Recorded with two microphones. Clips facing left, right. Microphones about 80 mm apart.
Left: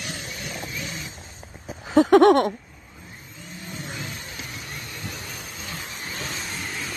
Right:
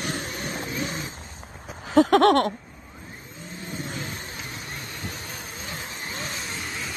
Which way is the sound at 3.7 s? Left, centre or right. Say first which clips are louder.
Right 2 dB; right.